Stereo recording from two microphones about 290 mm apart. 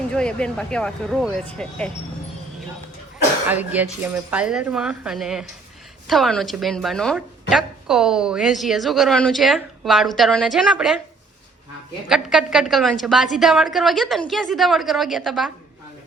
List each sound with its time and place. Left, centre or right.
0.1 s a woman's voice: centre
3.5 s a woman's voice: centre
12.0 s a woman's voice: centre